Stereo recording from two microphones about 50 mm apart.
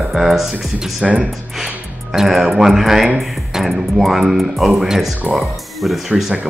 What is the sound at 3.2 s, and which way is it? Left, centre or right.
Speech, centre.